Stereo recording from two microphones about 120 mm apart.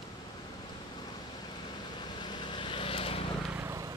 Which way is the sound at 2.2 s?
40° left (ahead or behind).